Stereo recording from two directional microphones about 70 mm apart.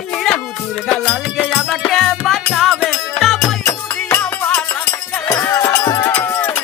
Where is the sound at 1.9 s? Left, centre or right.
Centre.